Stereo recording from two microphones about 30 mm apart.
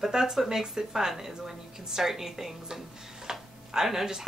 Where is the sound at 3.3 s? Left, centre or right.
Centre.